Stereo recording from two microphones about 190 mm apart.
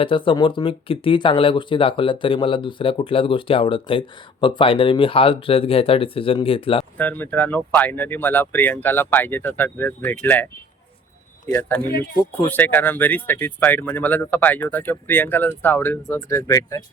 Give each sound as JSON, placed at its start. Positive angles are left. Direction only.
{"t": 0.0, "sound": "speech", "side_deg": 25}
{"t": 6.9, "sound": "speech", "side_deg": 10}
{"t": 11.4, "sound": "speech", "side_deg": 20}